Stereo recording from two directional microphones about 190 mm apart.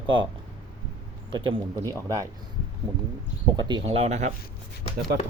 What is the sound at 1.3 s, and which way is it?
Speech, 25° right (ahead or behind).